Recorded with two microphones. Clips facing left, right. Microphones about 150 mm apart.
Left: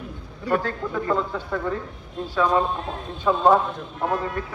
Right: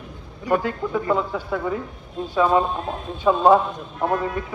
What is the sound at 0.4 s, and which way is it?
Speech, 15° right (ahead or behind).